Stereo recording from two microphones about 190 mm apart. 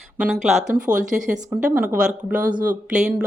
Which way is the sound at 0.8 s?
45° right (ahead or behind).